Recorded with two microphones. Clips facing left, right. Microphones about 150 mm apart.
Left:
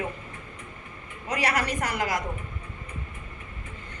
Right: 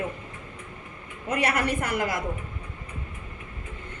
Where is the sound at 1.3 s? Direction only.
55° right (ahead or behind).